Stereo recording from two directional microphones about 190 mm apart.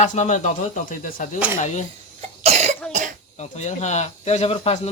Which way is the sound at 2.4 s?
35° right (ahead or behind).